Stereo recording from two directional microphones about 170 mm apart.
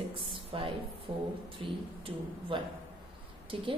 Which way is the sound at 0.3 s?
30° right (ahead or behind).